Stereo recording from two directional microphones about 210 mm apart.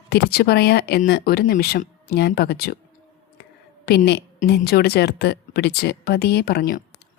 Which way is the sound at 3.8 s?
50° left (ahead or behind).